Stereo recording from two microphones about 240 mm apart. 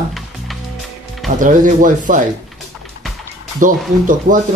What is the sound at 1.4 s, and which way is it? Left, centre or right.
Speech, right.